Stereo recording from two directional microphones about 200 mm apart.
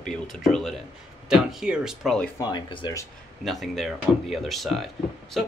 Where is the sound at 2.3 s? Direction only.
20° left (ahead or behind).